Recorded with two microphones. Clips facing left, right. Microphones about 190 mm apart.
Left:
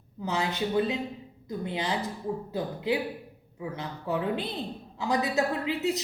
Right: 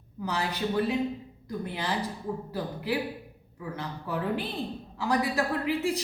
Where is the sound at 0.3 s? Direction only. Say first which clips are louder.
Left 1 dB; 20° left (ahead or behind).